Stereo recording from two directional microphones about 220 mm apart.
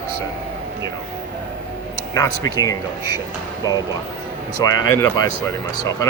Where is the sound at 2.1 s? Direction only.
15° left (ahead or behind).